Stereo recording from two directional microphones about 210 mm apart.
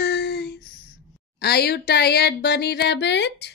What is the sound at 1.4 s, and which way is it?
Speech, 50° left (ahead or behind).